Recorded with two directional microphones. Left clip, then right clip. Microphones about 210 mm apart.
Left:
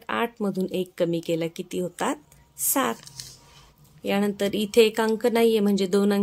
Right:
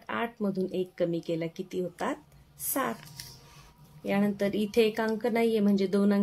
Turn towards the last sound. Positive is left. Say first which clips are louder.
# left 5 dB
turn(degrees=40)  # may be behind; listen again after turning